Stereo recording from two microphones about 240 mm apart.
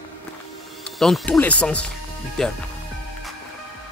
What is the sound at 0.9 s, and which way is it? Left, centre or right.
Speech, centre.